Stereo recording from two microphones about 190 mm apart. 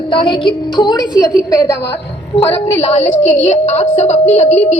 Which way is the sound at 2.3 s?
35° left (ahead or behind).